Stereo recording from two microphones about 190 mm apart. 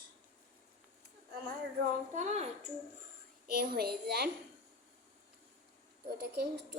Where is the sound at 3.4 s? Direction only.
55° right (ahead or behind).